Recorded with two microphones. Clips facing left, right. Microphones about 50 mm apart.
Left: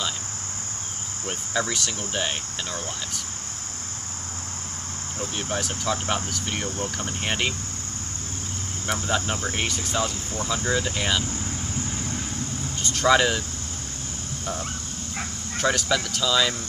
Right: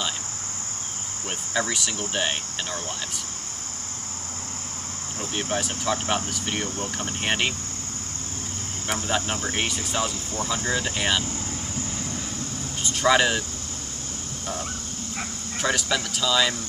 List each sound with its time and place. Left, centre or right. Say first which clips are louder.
1.5 s speech: even; centre
5.2 s speech: right 1 dB; centre
9.0 s speech: even; centre
12.8 s speech: even; centre
15.6 s speech: left 2 dB; centre